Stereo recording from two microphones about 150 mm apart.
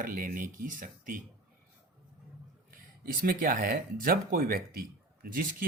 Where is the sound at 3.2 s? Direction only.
70° right (ahead or behind).